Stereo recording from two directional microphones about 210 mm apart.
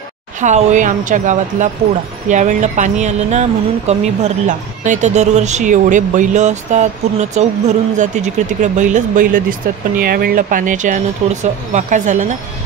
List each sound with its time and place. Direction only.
0.4 s speech: 35° right (ahead or behind)